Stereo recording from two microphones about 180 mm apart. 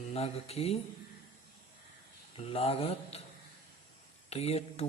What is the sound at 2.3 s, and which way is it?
Speech, 30° left (ahead or behind).